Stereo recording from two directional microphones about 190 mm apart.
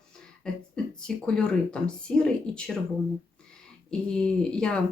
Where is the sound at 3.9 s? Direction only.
5° left (ahead or behind).